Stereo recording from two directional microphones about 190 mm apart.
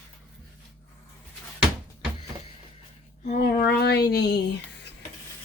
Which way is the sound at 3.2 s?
40° left (ahead or behind).